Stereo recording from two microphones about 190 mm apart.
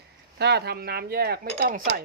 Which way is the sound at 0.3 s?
60° right (ahead or behind).